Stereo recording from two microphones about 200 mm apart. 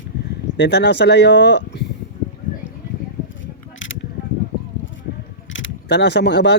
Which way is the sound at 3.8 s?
70° left (ahead or behind).